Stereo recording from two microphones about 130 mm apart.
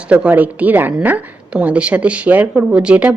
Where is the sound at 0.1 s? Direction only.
10° right (ahead or behind).